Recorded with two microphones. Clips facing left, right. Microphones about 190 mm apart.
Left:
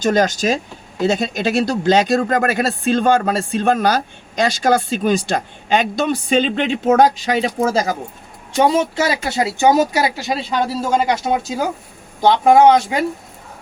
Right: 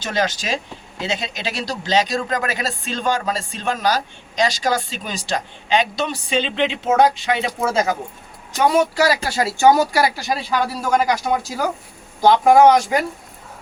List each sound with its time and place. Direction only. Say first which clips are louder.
0.0 s speech: left 7 dB; 45° left (ahead or behind); by 13.1 s 25° left (ahead or behind)